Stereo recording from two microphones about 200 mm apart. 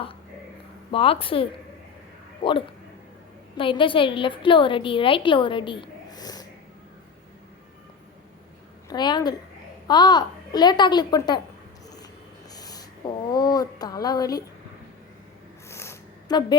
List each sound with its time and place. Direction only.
0.9 s a woman's voice: 30° left (ahead or behind)
8.9 s a woman's voice: 20° left (ahead or behind)
12.5 s a sound: 20° left (ahead or behind)
13.3 s a woman's voice: 20° left (ahead or behind)
15.7 s zipper: 15° left (ahead or behind)